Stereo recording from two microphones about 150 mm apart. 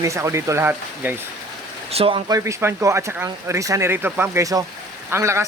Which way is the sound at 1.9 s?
40° right (ahead or behind).